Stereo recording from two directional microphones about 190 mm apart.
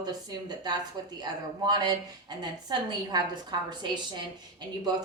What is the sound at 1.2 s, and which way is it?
Speech, 20° right (ahead or behind).